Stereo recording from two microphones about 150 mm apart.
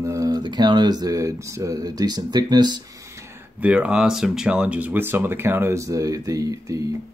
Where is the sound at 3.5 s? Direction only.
10° right (ahead or behind).